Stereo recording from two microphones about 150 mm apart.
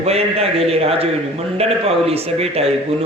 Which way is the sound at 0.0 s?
45° right (ahead or behind).